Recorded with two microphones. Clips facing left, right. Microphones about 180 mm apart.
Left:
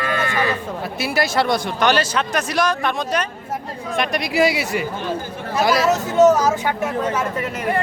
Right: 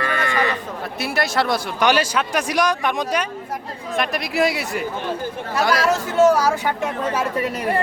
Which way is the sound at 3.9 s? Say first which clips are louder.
Left 2 dB; centre (ahead or behind).